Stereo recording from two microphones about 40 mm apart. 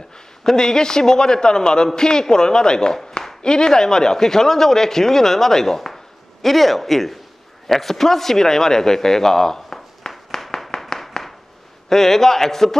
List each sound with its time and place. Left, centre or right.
0.4 s a man's voice: centre
7.6 s a sound: centre
11.9 s a man's voice: centre